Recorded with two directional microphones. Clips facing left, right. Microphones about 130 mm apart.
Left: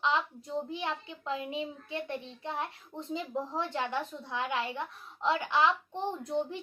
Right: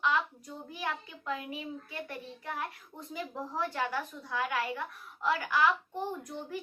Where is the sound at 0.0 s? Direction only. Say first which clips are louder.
Even; 25° left (ahead or behind).